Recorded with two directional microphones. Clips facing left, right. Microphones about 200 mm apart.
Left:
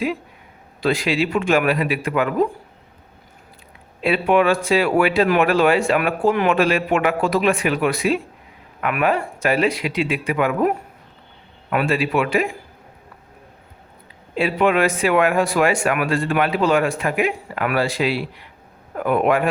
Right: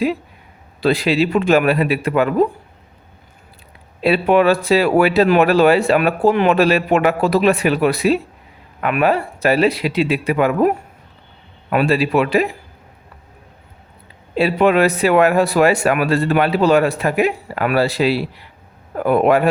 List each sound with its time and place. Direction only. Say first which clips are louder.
0.8 s speech: right 4 dB; 35° right (ahead or behind)
4.0 s speech: right 3 dB; 35° right (ahead or behind)
11.7 s speech: right 4 dB; 30° right (ahead or behind)
14.3 s speech: right 4 dB; 35° right (ahead or behind)